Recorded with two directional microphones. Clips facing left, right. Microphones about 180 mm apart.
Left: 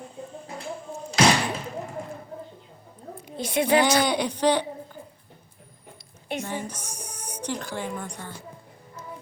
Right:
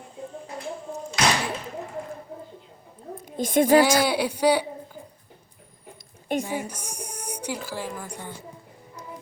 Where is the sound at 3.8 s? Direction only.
5° right (ahead or behind).